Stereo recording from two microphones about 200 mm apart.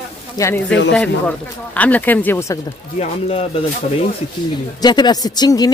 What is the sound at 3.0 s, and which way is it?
Speech, 30° left (ahead or behind).